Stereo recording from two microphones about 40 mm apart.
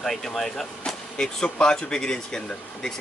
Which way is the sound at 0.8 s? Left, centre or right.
Centre.